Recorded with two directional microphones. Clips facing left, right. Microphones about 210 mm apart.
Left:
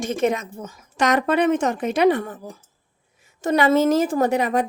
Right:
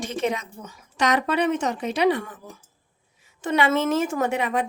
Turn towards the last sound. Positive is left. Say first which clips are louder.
# left 4 dB
turn(degrees=40)  # may be behind; listen again after turning